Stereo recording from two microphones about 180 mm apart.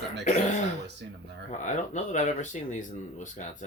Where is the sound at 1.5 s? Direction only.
40° left (ahead or behind).